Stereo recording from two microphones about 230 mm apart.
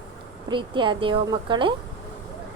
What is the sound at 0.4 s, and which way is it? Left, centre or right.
A woman's voice, right.